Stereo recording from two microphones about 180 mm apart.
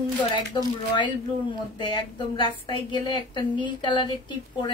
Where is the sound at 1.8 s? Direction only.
25° left (ahead or behind).